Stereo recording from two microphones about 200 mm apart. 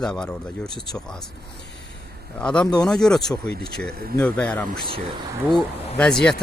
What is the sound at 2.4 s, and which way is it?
Speech, 5° left (ahead or behind).